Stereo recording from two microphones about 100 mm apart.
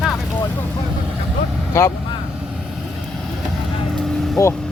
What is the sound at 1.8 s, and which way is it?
Speech, 25° left (ahead or behind).